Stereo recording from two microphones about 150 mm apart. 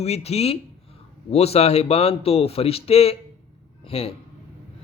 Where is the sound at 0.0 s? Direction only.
45° left (ahead or behind).